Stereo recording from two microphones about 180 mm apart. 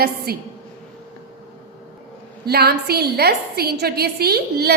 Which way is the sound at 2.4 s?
65° right (ahead or behind).